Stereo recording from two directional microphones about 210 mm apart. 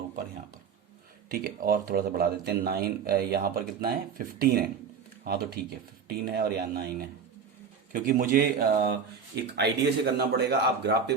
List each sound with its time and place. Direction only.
1.3 s speech: 45° right (ahead or behind)
5.2 s speech: 45° right (ahead or behind)